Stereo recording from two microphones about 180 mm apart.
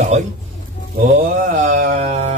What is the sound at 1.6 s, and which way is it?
Speech, 50° right (ahead or behind).